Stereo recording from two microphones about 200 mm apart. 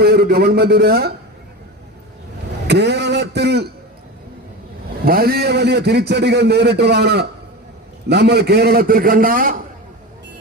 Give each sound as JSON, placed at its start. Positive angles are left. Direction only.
{"t": 0.0, "sound": "a man's voice", "side_deg": -50}
{"t": 2.6, "sound": "a man's voice", "side_deg": -55}
{"t": 5.0, "sound": "a man's voice", "side_deg": -50}